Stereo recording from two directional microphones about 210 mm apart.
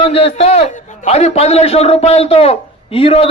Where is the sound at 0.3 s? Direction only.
30° left (ahead or behind).